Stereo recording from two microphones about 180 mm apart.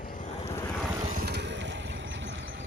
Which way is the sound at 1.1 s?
60° right (ahead or behind).